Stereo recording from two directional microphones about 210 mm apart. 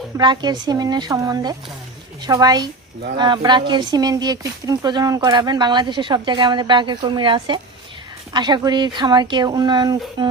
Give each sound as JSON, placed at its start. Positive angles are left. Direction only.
{"t": 0.2, "sound": "speech", "side_deg": -20}